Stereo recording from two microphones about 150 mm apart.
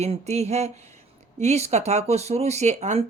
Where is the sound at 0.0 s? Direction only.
45° right (ahead or behind).